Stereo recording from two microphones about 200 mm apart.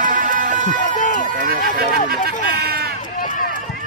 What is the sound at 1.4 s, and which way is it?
Music, 50° right (ahead or behind).